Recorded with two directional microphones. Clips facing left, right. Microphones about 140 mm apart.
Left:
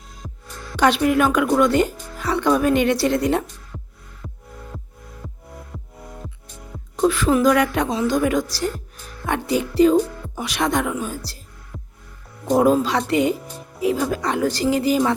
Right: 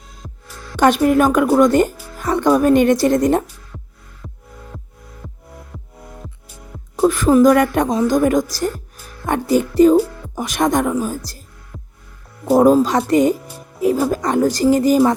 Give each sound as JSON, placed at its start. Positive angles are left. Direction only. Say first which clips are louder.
{"t": 0.2, "sound": "music", "louder": "even", "side_deg": 0}
{"t": 0.8, "sound": "a woman's voice", "louder": "right 4 dB", "side_deg": -45}
{"t": 3.7, "sound": "music", "louder": "even", "side_deg": 0}
{"t": 5.7, "sound": "music", "louder": "even", "side_deg": 0}
{"t": 7.0, "sound": "a woman's voice", "louder": "right 5 dB", "side_deg": -45}
{"t": 11.7, "sound": "music", "louder": "even", "side_deg": 0}
{"t": 12.5, "sound": "a woman's voice", "louder": "right 5 dB", "side_deg": -40}